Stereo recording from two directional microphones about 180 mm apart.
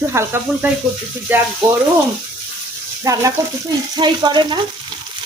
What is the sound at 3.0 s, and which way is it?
Speech, 20° right (ahead or behind).